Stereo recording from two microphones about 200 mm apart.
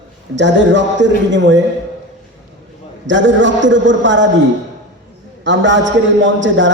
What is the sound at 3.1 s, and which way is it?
A man's voice, 65° right (ahead or behind).